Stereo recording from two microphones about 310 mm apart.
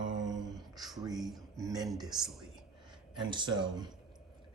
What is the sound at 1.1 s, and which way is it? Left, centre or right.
Speech, centre.